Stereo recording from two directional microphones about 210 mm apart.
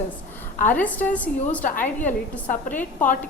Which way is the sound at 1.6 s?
35° left (ahead or behind).